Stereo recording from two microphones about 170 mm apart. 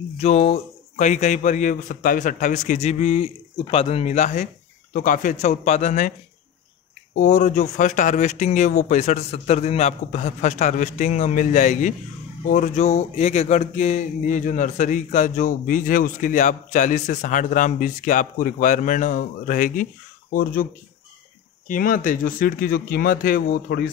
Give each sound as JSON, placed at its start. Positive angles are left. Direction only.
{"t": 0.2, "sound": "speech", "side_deg": 40}
{"t": 7.2, "sound": "speech", "side_deg": 45}
{"t": 21.6, "sound": "speech", "side_deg": 55}